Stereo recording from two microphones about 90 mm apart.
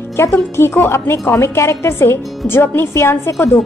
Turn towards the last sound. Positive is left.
turn(degrees=30)  # may be behind; listen again after turning